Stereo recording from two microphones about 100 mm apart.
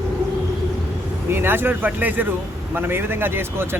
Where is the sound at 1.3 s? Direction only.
20° right (ahead or behind).